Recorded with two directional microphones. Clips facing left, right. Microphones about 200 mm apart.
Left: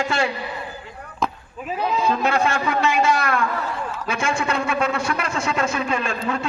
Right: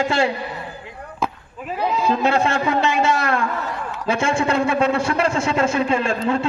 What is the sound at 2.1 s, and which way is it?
A man's voice, 30° right (ahead or behind).